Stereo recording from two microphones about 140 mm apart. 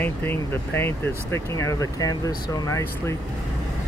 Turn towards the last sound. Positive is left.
turn(degrees=20)  # may be behind; listen again after turning